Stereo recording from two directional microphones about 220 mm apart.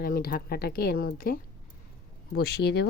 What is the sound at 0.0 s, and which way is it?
Speech, 40° left (ahead or behind).